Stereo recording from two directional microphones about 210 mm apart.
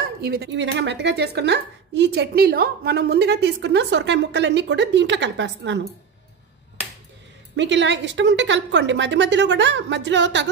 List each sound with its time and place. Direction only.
0.2 s a woman's voice: 50° right (ahead or behind)
7.5 s a woman's voice: 60° right (ahead or behind)